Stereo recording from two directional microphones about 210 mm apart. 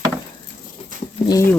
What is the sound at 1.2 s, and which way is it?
Speech, 15° left (ahead or behind).